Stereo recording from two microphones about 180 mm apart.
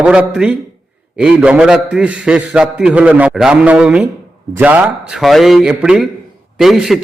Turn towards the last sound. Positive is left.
turn(degrees=0)  # may be behind; listen again after turning